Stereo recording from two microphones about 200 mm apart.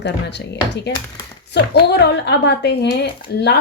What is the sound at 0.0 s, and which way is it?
Speech, 60° left (ahead or behind).